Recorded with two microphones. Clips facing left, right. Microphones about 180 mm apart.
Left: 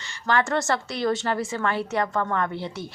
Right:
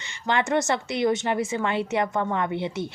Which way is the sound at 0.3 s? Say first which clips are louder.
Even; 20° right (ahead or behind).